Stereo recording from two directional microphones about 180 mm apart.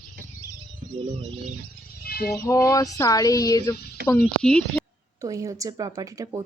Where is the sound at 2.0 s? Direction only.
55° left (ahead or behind).